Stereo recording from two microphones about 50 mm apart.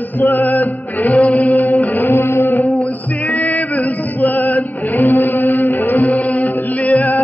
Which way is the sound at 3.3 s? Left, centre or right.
Left.